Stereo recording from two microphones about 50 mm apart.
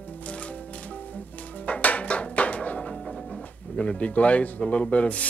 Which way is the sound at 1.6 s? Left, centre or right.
Left.